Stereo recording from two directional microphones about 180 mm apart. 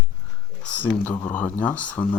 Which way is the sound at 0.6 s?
10° left (ahead or behind).